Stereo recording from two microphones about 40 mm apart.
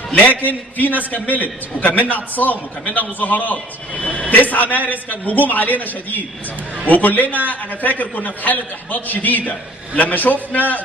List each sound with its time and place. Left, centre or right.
0.5 s a man's voice: left
3.9 s a man's voice: left
4.3 s a man's voice: left